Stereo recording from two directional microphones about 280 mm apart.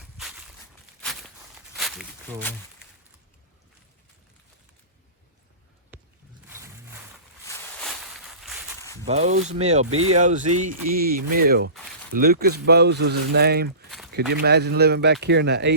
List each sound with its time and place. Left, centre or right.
0.2 s walk: centre
1.7 s walk: centre
7.4 s a sound: centre
9.0 s speech: right